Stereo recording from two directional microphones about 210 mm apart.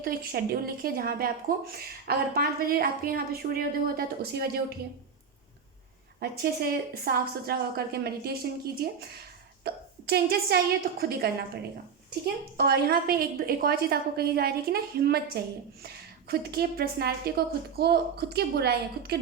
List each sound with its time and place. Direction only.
0.0 s a woman's voice: 45° right (ahead or behind)
6.1 s a woman's voice: 45° right (ahead or behind)